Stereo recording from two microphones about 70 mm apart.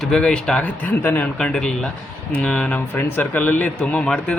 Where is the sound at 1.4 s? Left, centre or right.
Centre.